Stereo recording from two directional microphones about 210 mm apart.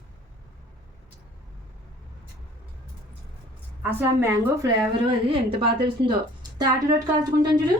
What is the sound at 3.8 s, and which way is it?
Speech, 10° right (ahead or behind).